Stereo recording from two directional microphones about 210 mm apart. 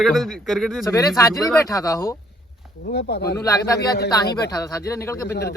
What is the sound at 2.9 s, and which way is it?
Speech, 50° left (ahead or behind).